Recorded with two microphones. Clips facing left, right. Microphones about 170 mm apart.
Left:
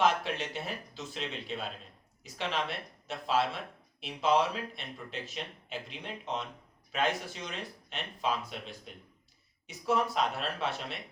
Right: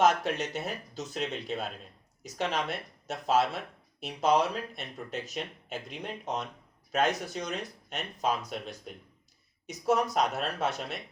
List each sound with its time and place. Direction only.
0.0 s speech: 40° right (ahead or behind)